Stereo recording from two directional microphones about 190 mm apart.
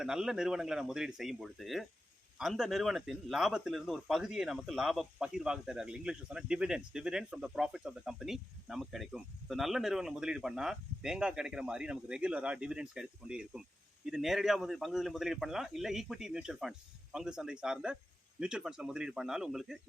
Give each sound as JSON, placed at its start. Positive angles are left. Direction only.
{"t": 0.0, "sound": "speech", "side_deg": -5}